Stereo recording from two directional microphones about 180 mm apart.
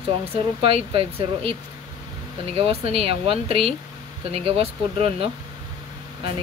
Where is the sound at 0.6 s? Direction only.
30° right (ahead or behind).